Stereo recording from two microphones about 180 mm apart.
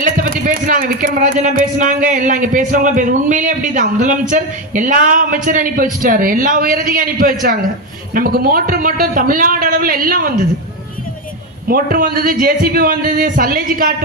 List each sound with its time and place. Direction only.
0.0 s a man's voice: 50° right (ahead or behind)
11.7 s a man's voice: 55° right (ahead or behind)